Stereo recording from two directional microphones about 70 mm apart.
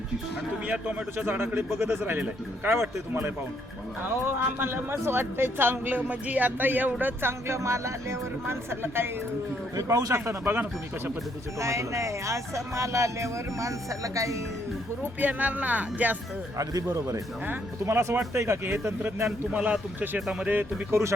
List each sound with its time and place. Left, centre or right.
0.7 s speech: right
1.2 s speech: right
4.4 s speech: right
9.7 s speech: right
10.2 s speech: right
11.6 s speech: right
15.2 s speech: right
16.6 s speech: right
17.8 s speech: right
19.5 s speech: centre
20.5 s speech: right